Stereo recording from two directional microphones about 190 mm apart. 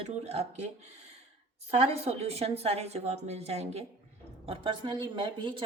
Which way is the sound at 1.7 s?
30° right (ahead or behind).